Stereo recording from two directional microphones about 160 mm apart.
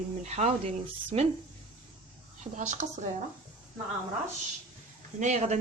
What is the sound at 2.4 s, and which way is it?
Speech, 50° right (ahead or behind).